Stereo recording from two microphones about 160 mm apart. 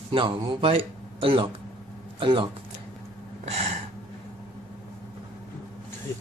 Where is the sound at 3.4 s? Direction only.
40° right (ahead or behind).